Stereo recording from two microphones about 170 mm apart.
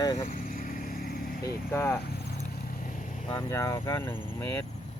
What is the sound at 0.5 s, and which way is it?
Vehicle, 50° left (ahead or behind).